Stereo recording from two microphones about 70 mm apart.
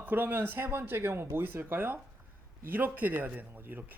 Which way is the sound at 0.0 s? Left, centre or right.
Right.